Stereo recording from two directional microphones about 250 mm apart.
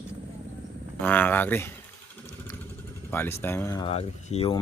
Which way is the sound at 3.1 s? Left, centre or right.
Centre.